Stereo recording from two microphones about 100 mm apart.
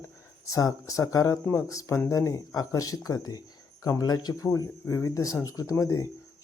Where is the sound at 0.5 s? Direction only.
35° left (ahead or behind).